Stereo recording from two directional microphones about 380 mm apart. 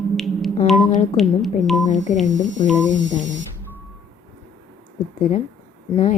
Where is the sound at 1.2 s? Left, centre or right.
Centre.